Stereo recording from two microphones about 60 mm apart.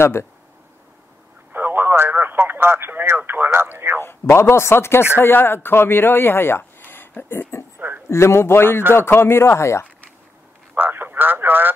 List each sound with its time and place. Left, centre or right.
0.0 s speech: left
1.5 s speech: right
4.0 s speech: left
10.8 s a sound: right